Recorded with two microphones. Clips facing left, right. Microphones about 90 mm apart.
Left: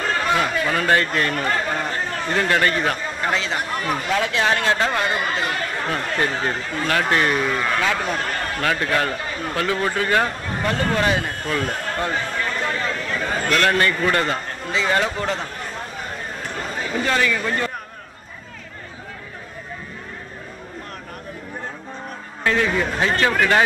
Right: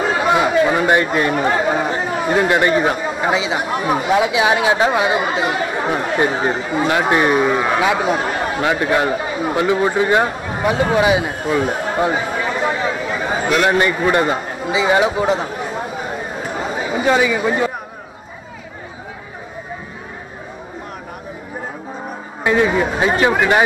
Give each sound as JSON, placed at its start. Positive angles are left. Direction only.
{"t": 0.0, "sound": "speech", "side_deg": -10}
{"t": 22.4, "sound": "speech", "side_deg": -15}